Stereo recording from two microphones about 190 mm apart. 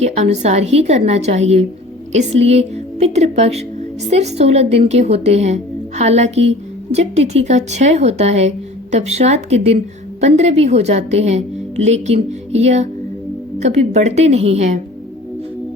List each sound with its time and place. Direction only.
0.0 s a woman's voice: 35° right (ahead or behind)